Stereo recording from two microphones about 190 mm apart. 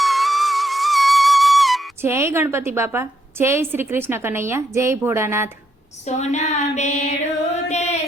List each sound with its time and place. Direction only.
0.0 s music: centre (ahead or behind)
2.0 s a woman's voice: 15° right (ahead or behind)
6.1 s a sound: 35° left (ahead or behind)